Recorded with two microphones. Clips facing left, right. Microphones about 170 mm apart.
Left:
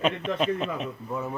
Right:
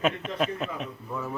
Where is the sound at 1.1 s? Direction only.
20° left (ahead or behind).